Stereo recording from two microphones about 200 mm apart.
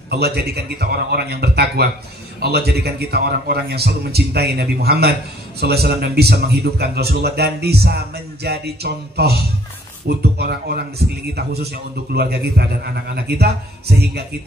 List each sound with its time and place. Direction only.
0.1 s speech: 55° right (ahead or behind)